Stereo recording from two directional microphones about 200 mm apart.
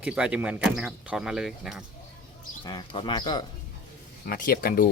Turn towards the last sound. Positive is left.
turn(degrees=45)  # may be behind; listen again after turning